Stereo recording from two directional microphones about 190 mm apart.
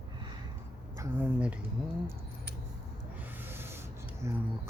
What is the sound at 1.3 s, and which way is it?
Speech, 5° right (ahead or behind).